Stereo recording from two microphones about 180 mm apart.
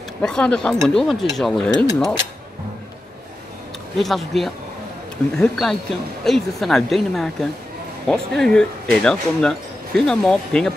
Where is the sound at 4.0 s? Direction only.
Centre (ahead or behind).